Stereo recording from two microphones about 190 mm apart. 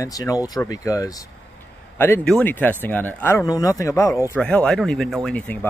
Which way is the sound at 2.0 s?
10° left (ahead or behind).